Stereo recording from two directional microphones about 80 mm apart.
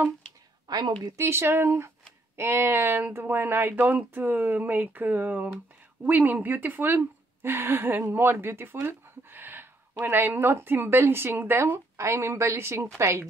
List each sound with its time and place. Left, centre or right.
0.7 s a woman's voice: right
1.1 s speech: right
12.0 s speech: right